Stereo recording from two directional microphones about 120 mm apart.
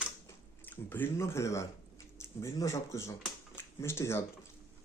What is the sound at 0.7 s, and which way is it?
Speech, 15° left (ahead or behind).